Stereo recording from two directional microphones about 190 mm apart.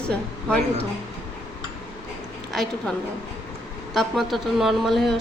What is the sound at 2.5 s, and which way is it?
Speech, centre (ahead or behind).